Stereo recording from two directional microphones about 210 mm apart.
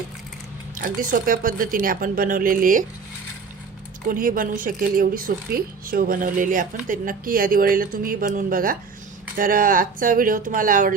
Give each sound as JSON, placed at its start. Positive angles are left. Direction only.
{"t": 0.8, "sound": "speech", "side_deg": -40}
{"t": 4.1, "sound": "speech", "side_deg": -40}